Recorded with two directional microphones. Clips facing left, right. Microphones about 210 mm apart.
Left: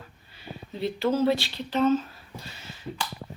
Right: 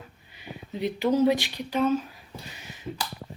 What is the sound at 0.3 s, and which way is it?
Speech, 15° right (ahead or behind).